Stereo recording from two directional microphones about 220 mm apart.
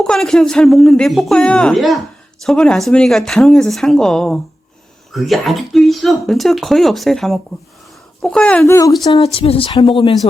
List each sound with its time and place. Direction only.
0.0 s speech: centre (ahead or behind)
9.1 s speech: 25° left (ahead or behind)